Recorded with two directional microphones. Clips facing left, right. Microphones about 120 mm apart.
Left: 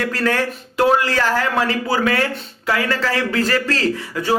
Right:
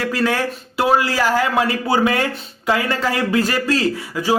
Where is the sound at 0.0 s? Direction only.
10° right (ahead or behind).